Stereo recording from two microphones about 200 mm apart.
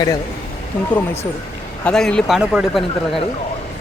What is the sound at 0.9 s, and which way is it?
Speech, 10° left (ahead or behind).